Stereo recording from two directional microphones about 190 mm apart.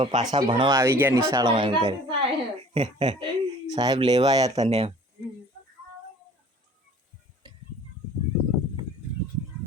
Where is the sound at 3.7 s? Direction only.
20° right (ahead or behind).